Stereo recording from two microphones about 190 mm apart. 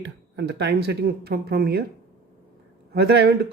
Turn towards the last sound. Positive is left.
turn(degrees=-60)  # may be behind; listen again after turning